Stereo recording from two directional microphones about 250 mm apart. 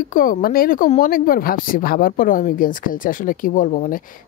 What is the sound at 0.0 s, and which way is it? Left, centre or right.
Speech, left.